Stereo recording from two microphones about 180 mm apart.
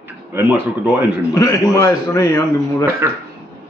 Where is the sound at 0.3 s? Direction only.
15° right (ahead or behind).